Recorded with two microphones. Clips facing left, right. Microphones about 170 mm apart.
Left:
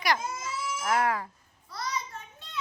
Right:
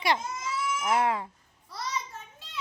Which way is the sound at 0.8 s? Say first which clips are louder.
Even; 20° right (ahead or behind).